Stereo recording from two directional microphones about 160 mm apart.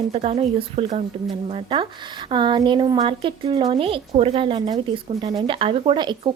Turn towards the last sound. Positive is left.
turn(degrees=-35)  # may be behind; listen again after turning